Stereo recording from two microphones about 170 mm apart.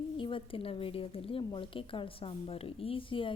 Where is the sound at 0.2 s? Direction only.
30° left (ahead or behind).